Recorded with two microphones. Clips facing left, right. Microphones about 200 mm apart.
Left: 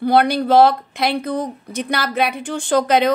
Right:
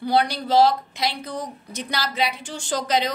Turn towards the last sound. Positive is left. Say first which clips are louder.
# left 8 dB
turn(degrees=60)  # may be behind; listen again after turning